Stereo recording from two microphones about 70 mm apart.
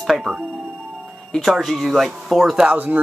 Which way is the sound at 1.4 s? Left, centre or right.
Centre.